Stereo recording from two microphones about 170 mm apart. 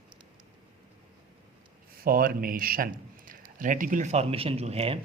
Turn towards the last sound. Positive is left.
turn(degrees=-35)  # may be behind; listen again after turning